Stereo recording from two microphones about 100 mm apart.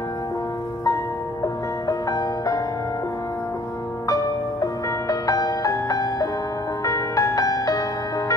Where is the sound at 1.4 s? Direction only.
35° left (ahead or behind).